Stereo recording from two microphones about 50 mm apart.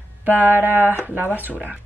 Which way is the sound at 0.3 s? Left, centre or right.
Right.